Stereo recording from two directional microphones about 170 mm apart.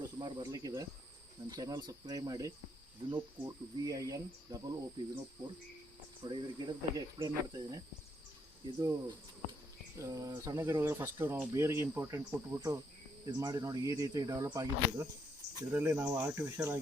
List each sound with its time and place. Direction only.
0.2 s speech: 25° right (ahead or behind)
8.8 s speech: 20° right (ahead or behind)